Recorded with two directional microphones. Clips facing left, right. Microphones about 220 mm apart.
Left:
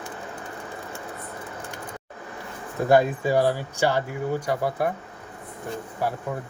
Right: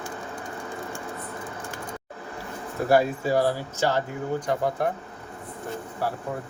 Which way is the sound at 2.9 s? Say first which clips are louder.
Left 2 dB; 15° left (ahead or behind).